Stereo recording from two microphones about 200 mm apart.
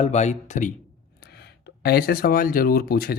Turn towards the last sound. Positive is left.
turn(degrees=50)  # may be behind; listen again after turning